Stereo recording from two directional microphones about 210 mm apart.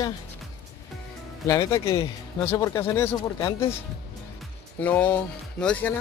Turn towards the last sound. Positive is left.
turn(degrees=5)  # may be behind; listen again after turning